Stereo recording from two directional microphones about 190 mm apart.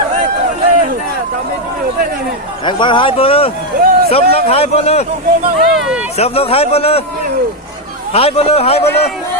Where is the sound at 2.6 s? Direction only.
25° left (ahead or behind).